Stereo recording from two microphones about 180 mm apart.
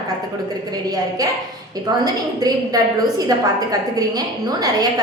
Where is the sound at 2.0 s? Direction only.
20° right (ahead or behind).